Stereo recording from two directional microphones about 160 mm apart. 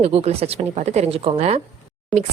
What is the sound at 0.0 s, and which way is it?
A woman's voice, 40° right (ahead or behind).